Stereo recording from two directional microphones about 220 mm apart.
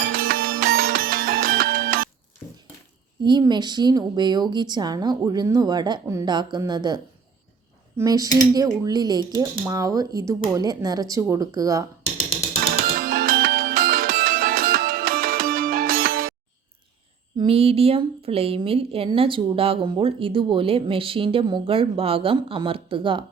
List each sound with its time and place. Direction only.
0.1 s music: 40° right (ahead or behind)
3.2 s a woman's voice: 20° right (ahead or behind)
13.0 s music: 40° right (ahead or behind)
17.3 s a woman's voice: 25° right (ahead or behind)